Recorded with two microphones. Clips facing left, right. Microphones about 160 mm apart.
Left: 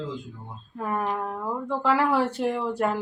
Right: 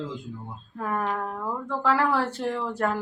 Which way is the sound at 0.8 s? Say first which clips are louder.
Even; 10° left (ahead or behind).